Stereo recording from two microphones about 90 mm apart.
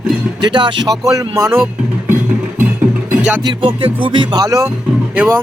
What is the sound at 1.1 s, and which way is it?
Speech, 35° right (ahead or behind).